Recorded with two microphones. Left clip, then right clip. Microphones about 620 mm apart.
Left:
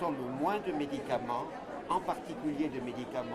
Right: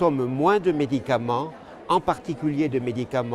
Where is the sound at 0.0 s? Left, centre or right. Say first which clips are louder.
Right 12 dB; right.